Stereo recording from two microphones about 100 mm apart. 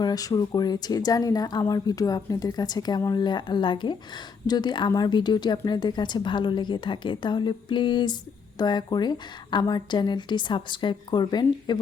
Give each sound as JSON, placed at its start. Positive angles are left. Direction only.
{"t": 0.0, "sound": "a woman's voice", "side_deg": 40}